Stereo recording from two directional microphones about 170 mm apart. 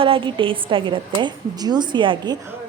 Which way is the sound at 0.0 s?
30° right (ahead or behind).